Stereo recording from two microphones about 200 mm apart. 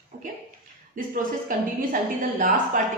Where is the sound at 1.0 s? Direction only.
45° right (ahead or behind).